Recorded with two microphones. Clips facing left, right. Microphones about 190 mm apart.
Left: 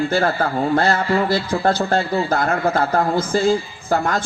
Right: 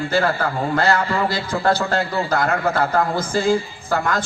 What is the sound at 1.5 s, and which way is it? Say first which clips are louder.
A man's voice: left 1 dB; 55° left (ahead or behind).